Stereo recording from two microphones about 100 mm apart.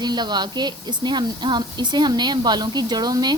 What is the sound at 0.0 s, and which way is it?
Speech, 45° right (ahead or behind).